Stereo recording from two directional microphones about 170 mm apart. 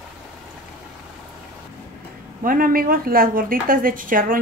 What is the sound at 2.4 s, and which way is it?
A woman's voice, 55° right (ahead or behind).